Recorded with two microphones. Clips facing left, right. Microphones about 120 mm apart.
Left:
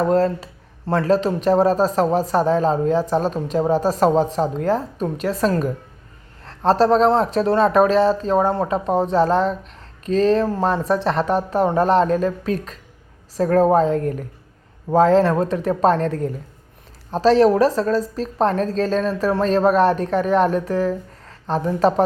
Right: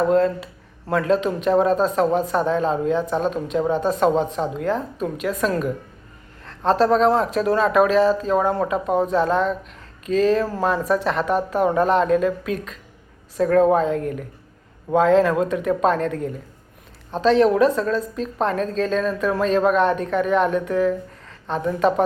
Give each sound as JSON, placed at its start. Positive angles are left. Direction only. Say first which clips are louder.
{"t": 0.0, "sound": "a woman's voice", "louder": "even", "side_deg": 35}